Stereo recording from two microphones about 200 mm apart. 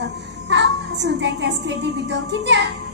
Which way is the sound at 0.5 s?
60° right (ahead or behind).